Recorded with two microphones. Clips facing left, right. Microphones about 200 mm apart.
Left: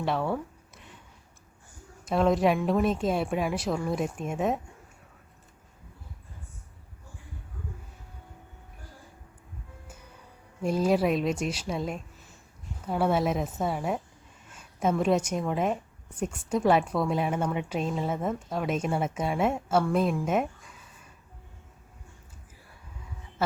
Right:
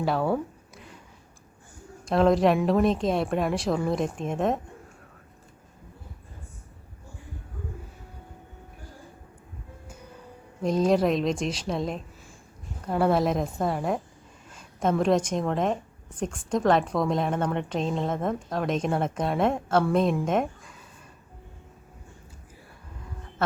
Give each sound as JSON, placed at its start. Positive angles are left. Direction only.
{"t": 0.0, "sound": "a woman's voice", "side_deg": 0}
{"t": 2.0, "sound": "a woman's voice", "side_deg": 0}
{"t": 10.6, "sound": "a woman's voice", "side_deg": 5}